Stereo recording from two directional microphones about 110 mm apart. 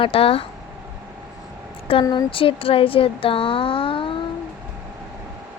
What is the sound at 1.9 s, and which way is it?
A woman's voice, 60° left (ahead or behind).